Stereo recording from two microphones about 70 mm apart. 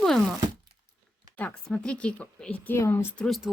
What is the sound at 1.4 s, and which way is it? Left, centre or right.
Speech, left.